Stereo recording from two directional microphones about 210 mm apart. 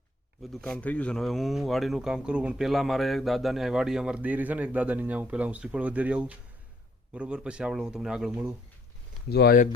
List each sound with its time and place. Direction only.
0.4 s speech: centre (ahead or behind)
9.3 s speech: 50° left (ahead or behind)